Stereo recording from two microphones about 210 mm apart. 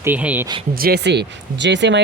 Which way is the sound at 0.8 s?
50° right (ahead or behind).